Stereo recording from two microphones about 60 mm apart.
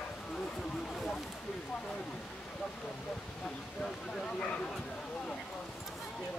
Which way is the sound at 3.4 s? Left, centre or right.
Centre.